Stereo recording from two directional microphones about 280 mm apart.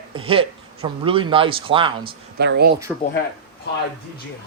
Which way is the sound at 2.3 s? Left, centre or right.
Right.